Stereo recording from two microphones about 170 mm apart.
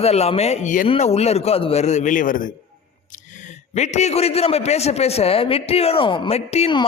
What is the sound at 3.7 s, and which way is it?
A man's voice, 40° left (ahead or behind).